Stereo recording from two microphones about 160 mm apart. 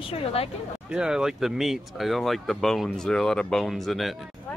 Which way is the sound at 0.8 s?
5° right (ahead or behind).